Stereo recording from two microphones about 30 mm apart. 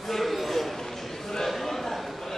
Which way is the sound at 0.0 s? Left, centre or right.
Centre.